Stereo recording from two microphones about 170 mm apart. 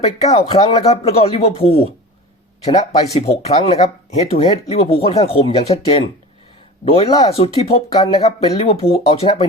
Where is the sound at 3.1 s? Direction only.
40° left (ahead or behind).